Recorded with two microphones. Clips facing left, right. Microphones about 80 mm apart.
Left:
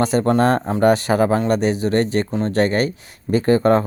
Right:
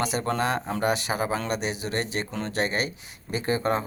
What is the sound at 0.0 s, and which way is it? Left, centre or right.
Speech, left.